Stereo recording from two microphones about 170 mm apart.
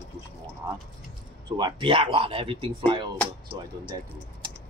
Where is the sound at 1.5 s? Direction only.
30° right (ahead or behind).